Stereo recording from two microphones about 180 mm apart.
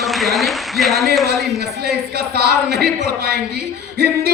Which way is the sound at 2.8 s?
60° right (ahead or behind).